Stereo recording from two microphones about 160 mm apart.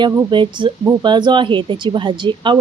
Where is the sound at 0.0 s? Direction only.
25° right (ahead or behind).